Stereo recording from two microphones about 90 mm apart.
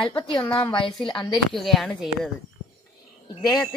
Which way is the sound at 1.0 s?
55° left (ahead or behind).